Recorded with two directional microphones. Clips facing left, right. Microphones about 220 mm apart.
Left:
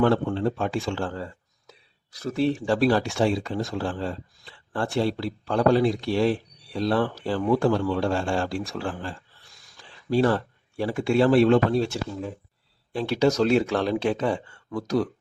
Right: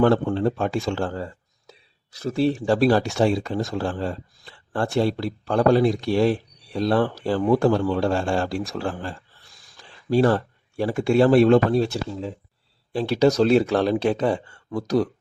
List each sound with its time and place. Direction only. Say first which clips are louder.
0.0 s speech: right 3 dB; 45° right (ahead or behind)
2.1 s speech: right 2 dB; 30° right (ahead or behind)